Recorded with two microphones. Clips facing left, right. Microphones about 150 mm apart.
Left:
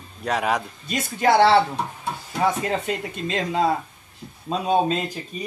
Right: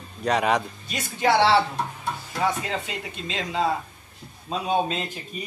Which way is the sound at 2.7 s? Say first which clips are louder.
Left 5 dB; 45° left (ahead or behind).